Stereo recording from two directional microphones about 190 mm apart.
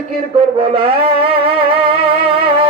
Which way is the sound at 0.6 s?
30° right (ahead or behind).